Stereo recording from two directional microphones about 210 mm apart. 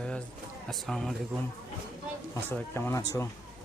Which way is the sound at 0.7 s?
Centre (ahead or behind).